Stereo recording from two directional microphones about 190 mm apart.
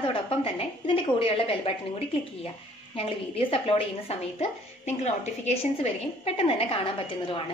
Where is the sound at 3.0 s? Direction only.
30° left (ahead or behind).